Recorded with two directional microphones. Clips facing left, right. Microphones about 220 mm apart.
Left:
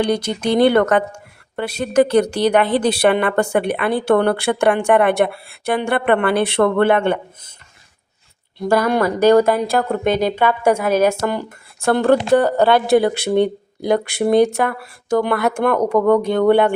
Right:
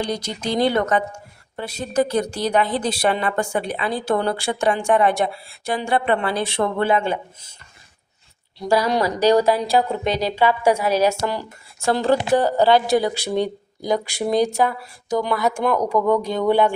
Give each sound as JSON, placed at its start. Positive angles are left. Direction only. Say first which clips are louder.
{"t": 0.0, "sound": "a woman's voice", "louder": "left 7 dB", "side_deg": 60}
{"t": 8.5, "sound": "a woman's voice", "louder": "left 3 dB", "side_deg": 55}